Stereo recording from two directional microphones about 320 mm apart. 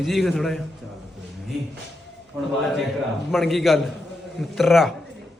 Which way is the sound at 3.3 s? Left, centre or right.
Centre.